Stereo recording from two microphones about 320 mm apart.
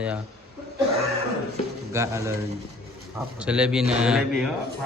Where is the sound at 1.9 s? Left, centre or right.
Centre.